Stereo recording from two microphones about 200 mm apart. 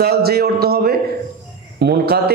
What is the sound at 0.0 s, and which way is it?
A man's voice, 50° right (ahead or behind).